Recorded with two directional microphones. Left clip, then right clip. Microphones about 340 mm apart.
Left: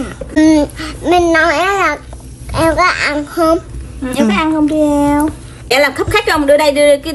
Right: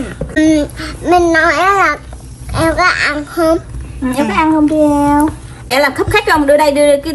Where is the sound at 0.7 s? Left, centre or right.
Centre.